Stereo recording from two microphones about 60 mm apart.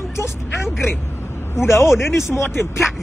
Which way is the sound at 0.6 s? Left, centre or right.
Centre.